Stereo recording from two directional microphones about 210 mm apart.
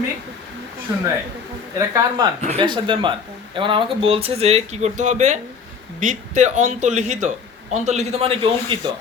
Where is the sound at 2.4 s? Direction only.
30° right (ahead or behind).